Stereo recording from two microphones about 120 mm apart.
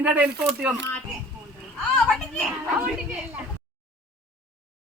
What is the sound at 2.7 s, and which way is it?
Speech, 10° right (ahead or behind).